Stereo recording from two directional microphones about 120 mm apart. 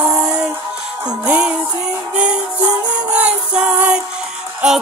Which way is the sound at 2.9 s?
10° right (ahead or behind).